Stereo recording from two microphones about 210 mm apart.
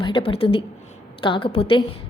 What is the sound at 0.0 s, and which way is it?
A woman's voice, 25° left (ahead or behind).